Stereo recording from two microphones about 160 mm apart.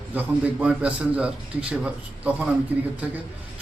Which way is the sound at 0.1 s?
10° right (ahead or behind).